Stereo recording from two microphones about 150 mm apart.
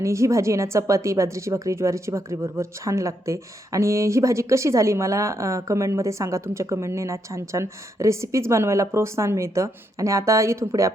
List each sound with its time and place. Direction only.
0.0 s speech: 20° right (ahead or behind)